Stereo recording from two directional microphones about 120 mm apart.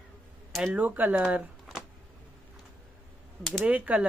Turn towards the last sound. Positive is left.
turn(degrees=-10)  # may be behind; listen again after turning